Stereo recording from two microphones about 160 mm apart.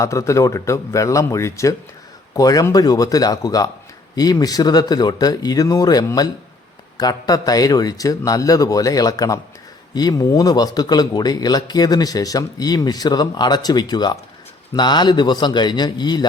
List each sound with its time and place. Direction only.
0.0 s speech: 20° left (ahead or behind)